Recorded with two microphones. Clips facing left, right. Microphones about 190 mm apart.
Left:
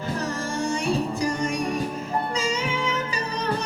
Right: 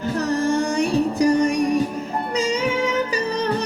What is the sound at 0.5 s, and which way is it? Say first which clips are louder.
Music: right 5 dB; 60° right (ahead or behind).